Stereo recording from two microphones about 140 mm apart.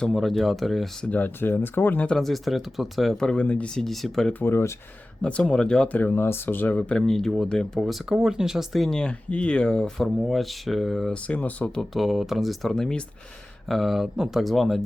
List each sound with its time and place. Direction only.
0.0 s speech: centre (ahead or behind)
1.1 s speech: 15° left (ahead or behind)